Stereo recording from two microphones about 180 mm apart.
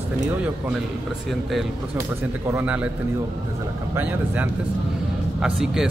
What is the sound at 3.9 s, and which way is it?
Speech, 10° right (ahead or behind).